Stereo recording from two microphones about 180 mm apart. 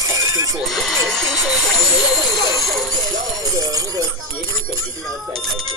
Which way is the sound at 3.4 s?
20° right (ahead or behind).